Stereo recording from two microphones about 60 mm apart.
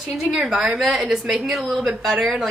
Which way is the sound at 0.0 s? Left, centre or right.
Centre.